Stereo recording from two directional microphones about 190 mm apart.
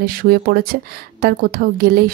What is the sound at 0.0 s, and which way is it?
A woman's voice, 50° right (ahead or behind).